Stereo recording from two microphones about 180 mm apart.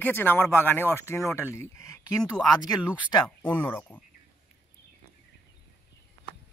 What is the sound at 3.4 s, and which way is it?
Speech, 10° left (ahead or behind).